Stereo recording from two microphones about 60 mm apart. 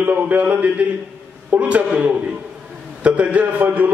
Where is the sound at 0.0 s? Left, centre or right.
Right.